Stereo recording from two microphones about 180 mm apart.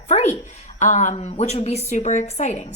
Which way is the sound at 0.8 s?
40° left (ahead or behind).